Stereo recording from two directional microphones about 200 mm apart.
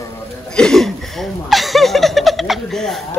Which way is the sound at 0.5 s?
5° left (ahead or behind).